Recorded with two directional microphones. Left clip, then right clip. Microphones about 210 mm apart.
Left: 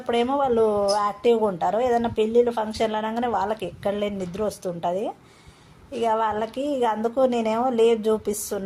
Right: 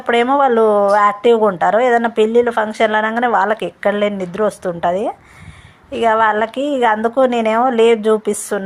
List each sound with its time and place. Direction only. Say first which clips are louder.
0.0 s a woman's voice: right 9 dB; 15° right (ahead or behind)